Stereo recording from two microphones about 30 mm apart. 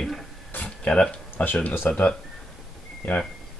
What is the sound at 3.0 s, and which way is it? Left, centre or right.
Speech, left.